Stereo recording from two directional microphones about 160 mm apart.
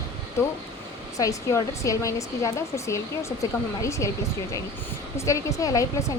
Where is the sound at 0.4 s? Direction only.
15° left (ahead or behind).